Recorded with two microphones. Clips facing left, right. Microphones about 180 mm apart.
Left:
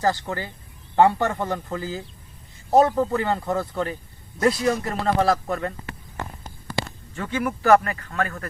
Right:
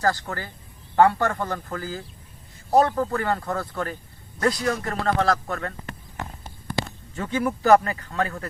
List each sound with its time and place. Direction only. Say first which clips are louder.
0.0 s a man's voice: left 1 dB; 20° left (ahead or behind)
2.7 s speech: left 2 dB; 5° left (ahead or behind)
3.0 s speech: left 2 dB; 20° left (ahead or behind)
7.2 s speech: right 1 dB; 20° right (ahead or behind)